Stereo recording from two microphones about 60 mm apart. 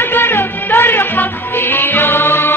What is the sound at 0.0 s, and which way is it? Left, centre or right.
Music, left.